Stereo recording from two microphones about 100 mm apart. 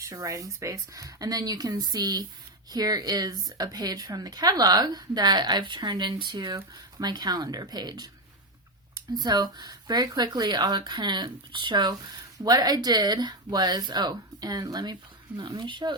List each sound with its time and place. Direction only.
0.0 s a woman's voice: 35° right (ahead or behind)
9.1 s a woman's voice: 45° right (ahead or behind)